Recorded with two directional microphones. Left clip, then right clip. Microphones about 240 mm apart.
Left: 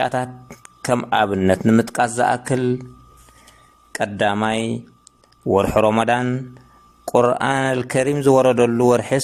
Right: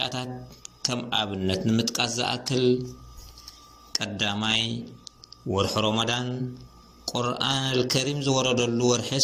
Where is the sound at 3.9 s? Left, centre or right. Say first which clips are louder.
Left 7 dB; left.